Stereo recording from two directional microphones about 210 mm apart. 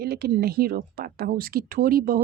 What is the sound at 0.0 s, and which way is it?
Speech, 50° right (ahead or behind).